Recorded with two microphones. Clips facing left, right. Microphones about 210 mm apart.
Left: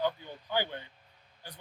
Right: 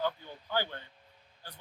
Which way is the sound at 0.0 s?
15° left (ahead or behind).